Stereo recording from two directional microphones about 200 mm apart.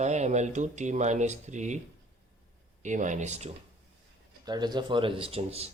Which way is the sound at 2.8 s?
40° right (ahead or behind).